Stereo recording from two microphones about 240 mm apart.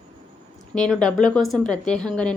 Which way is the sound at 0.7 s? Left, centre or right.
Centre.